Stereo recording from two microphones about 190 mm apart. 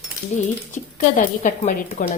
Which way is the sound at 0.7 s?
40° left (ahead or behind).